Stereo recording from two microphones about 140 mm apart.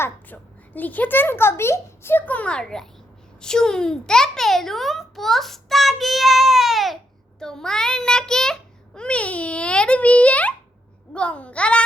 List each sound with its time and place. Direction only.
0.0 s a child's voice: 10° left (ahead or behind)